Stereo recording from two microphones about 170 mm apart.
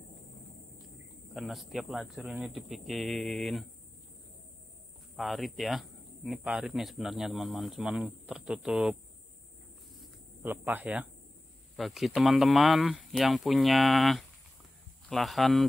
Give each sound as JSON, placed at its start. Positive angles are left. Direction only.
{"t": 1.3, "sound": "speech", "side_deg": 0}
{"t": 5.1, "sound": "speech", "side_deg": 0}
{"t": 9.9, "sound": "a sound", "side_deg": -10}
{"t": 11.7, "sound": "speech", "side_deg": 0}